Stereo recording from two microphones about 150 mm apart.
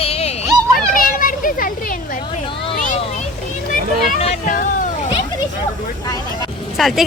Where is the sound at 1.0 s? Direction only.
65° left (ahead or behind).